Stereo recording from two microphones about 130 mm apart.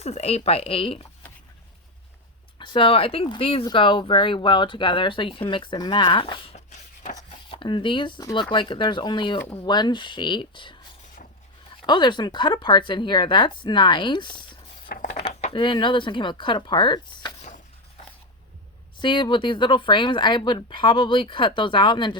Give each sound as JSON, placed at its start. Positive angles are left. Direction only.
{"t": 0.0, "sound": "speech", "side_deg": 55}
{"t": 2.6, "sound": "speech", "side_deg": 40}
{"t": 6.7, "sound": "a sound", "side_deg": 65}
{"t": 7.3, "sound": "speech", "side_deg": 40}
{"t": 11.8, "sound": "speech", "side_deg": 35}
{"t": 15.0, "sound": "a sound", "side_deg": 55}
{"t": 15.5, "sound": "speech", "side_deg": 35}
{"t": 18.9, "sound": "speech", "side_deg": 35}